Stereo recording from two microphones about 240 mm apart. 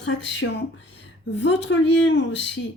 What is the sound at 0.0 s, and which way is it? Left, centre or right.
Speech, left.